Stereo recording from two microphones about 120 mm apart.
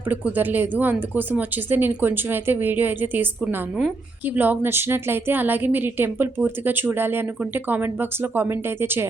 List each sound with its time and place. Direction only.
0.1 s a woman's voice: 15° right (ahead or behind)